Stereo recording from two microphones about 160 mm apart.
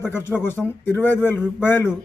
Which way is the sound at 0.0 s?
15° left (ahead or behind).